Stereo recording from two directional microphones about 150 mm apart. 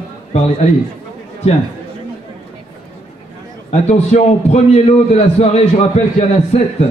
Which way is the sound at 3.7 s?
50° left (ahead or behind).